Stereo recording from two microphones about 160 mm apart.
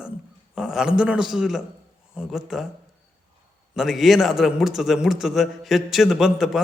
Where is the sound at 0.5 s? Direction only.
5° right (ahead or behind).